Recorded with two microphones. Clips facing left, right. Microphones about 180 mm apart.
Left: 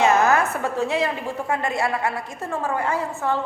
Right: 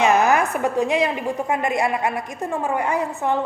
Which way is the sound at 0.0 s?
15° right (ahead or behind).